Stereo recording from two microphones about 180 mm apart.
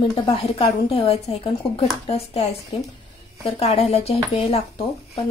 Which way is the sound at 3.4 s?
30° left (ahead or behind).